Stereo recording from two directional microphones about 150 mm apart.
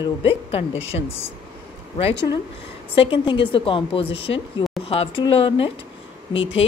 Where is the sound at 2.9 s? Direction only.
35° left (ahead or behind).